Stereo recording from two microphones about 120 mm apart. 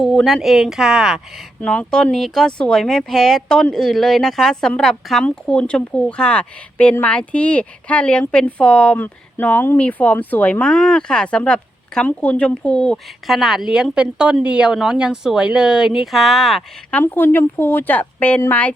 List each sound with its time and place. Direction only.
0.0 s speech: centre (ahead or behind)
1.6 s a woman's voice: 10° left (ahead or behind)
16.9 s a woman's voice: 15° left (ahead or behind)